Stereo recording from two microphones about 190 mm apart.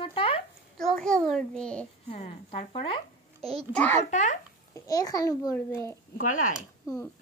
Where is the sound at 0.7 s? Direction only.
5° left (ahead or behind).